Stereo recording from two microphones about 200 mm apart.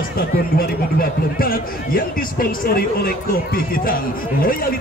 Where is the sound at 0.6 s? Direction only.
45° left (ahead or behind).